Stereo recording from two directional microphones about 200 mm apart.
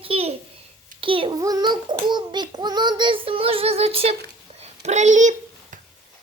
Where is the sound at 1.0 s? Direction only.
25° right (ahead or behind).